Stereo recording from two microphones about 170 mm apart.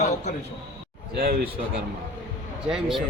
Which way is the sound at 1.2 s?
65° right (ahead or behind).